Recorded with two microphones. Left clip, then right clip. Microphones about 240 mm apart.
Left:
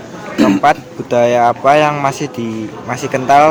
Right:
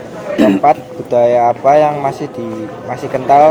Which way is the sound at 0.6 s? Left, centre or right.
Left.